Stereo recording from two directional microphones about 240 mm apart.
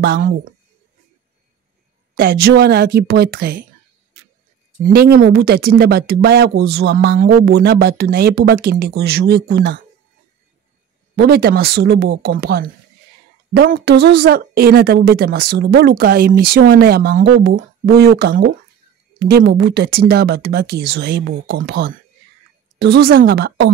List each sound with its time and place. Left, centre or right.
0.0 s speech: right
2.4 s speech: right
4.8 s speech: right
11.1 s speech: right